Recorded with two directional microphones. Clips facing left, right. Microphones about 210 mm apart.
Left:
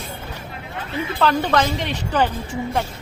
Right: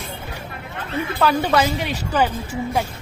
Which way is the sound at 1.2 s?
10° right (ahead or behind).